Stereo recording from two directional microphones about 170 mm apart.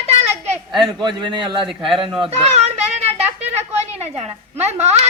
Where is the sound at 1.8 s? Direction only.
30° right (ahead or behind).